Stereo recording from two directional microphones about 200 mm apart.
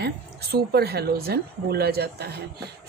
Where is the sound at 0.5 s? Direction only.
55° right (ahead or behind).